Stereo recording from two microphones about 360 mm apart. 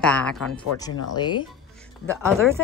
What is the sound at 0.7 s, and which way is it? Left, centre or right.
Speech, left.